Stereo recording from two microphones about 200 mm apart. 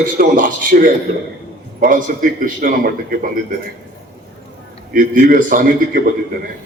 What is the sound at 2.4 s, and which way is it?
Speech, 45° right (ahead or behind).